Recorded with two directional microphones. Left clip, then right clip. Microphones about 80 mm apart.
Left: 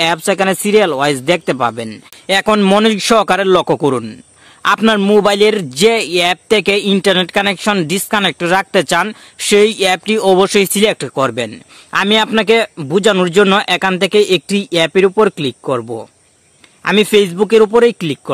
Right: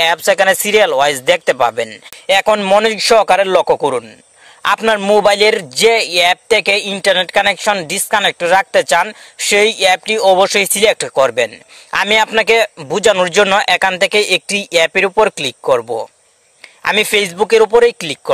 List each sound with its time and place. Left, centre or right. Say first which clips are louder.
0.0 s speech: right 2 dB; right
2.5 s speech: left 1 dB; centre
2.8 s speech: right 1 dB; centre
4.6 s speech: even; right
6.6 s speech: left 1 dB; right
10.9 s speech: right 3 dB; right
16.9 s speech: left 3 dB; right